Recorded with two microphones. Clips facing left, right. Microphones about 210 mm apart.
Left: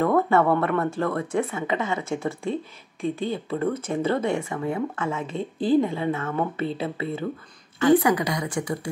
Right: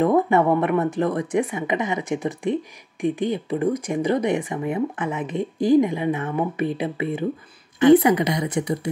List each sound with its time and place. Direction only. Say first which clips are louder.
0.0 s a woman's voice: right 2 dB; 15° right (ahead or behind)